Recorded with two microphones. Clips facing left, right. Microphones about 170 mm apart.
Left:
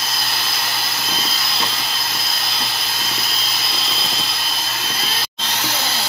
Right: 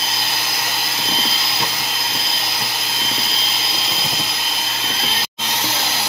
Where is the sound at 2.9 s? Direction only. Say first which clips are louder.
Right 1 dB; 25° right (ahead or behind).